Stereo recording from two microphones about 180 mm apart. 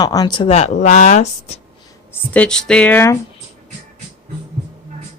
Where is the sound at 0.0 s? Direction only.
20° left (ahead or behind); by 1.5 s 35° left (ahead or behind).